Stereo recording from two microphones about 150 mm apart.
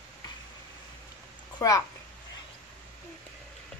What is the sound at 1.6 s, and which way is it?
Speech, 20° left (ahead or behind).